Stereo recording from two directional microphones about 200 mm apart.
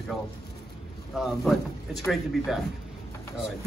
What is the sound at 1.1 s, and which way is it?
A man's voice, centre (ahead or behind).